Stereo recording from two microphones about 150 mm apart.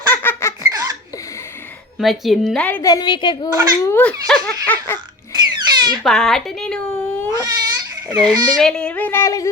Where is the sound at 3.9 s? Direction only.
10° left (ahead or behind).